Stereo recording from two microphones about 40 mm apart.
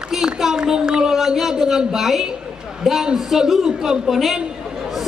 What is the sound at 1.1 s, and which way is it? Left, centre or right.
A man's voice, centre.